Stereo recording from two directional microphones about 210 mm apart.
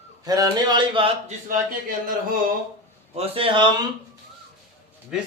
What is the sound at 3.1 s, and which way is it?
Speech, 25° right (ahead or behind).